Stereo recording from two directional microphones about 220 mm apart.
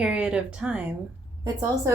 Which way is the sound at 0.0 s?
5° right (ahead or behind).